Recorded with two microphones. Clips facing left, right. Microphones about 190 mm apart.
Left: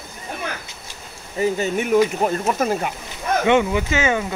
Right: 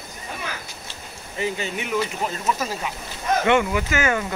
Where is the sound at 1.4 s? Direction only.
45° left (ahead or behind).